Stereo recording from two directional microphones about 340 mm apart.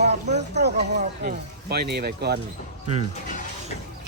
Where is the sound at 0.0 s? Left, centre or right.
Centre.